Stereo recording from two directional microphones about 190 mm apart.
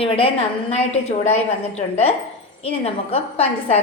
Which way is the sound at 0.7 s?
35° left (ahead or behind).